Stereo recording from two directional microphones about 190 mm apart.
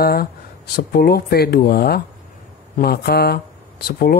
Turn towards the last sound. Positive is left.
turn(degrees=55)  # may be behind; listen again after turning